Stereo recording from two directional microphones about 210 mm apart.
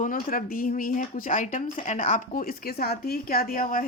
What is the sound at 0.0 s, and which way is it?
Speech, 40° left (ahead or behind).